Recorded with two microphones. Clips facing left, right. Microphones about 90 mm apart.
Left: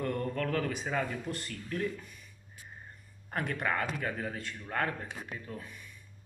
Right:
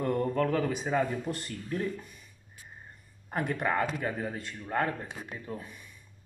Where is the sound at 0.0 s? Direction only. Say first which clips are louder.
Right 5 dB; 25° right (ahead or behind).